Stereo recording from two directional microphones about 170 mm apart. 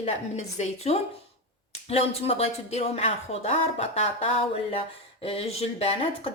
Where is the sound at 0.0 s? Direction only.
40° left (ahead or behind).